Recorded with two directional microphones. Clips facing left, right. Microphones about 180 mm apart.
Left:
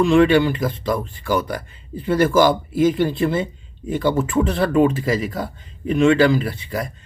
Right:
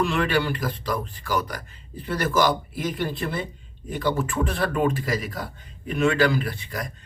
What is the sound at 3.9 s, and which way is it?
Speech, 25° left (ahead or behind).